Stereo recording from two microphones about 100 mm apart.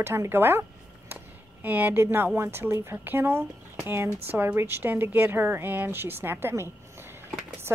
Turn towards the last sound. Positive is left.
turn(degrees=-25)  # may be behind; listen again after turning